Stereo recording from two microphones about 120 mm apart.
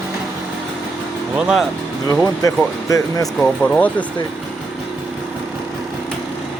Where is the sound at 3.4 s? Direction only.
10° left (ahead or behind).